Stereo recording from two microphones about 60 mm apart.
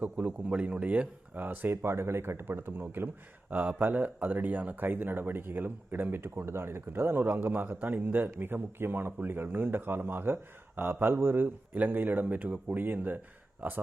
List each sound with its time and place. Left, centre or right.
0.0 s speech: right
1.7 s speech: right